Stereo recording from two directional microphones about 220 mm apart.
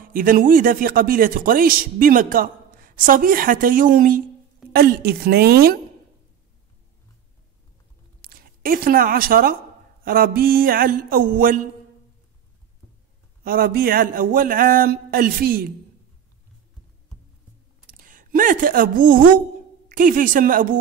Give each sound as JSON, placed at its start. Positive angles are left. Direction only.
{"t": 0.0, "sound": "a woman's voice", "side_deg": -40}
{"t": 8.2, "sound": "speech", "side_deg": -40}
{"t": 13.4, "sound": "speech", "side_deg": -40}
{"t": 17.9, "sound": "a woman's voice", "side_deg": -40}